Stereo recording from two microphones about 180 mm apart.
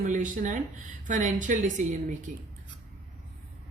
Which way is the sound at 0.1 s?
45° right (ahead or behind).